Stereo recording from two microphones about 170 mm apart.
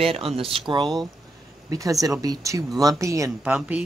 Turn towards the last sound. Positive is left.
turn(degrees=-10)  # may be behind; listen again after turning